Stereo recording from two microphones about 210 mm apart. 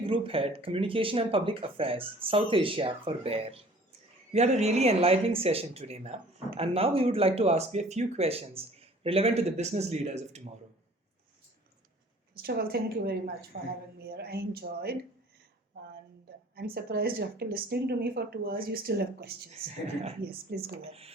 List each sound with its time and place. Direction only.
0.0 s speech: 25° right (ahead or behind)
12.4 s speech: 50° right (ahead or behind)
16.6 s speech: 50° right (ahead or behind)
20.8 s speech: 30° right (ahead or behind)